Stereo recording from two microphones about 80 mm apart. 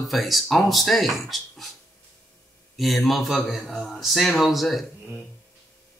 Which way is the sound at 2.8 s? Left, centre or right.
Centre.